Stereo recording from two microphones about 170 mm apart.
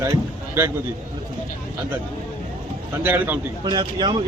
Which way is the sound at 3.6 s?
30° right (ahead or behind).